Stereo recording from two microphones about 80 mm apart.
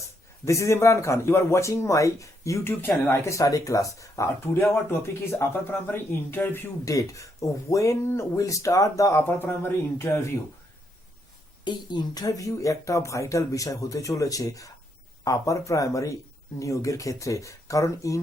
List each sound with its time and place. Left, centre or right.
0.4 s speech: left
2.8 s speech: left
3.2 s speech: left
4.5 s speech: left
6.8 s speech: left
9.2 s speech: left
11.6 s speech: left